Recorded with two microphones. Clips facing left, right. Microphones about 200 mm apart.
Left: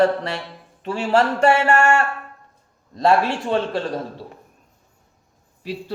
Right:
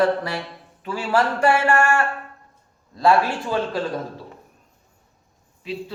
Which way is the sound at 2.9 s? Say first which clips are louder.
Left 1 dB; 25° left (ahead or behind).